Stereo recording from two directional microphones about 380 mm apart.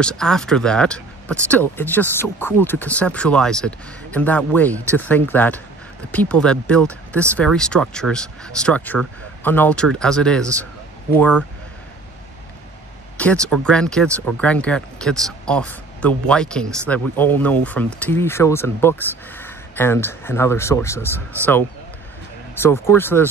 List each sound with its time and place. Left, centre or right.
0.0 s speech: centre
13.2 s speech: centre
22.6 s speech: centre